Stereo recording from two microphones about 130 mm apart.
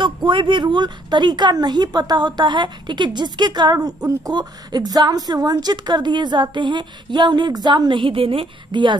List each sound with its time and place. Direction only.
0.0 s a woman's voice: 40° right (ahead or behind)